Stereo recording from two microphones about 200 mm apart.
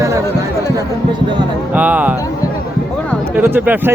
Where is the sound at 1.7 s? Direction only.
10° right (ahead or behind).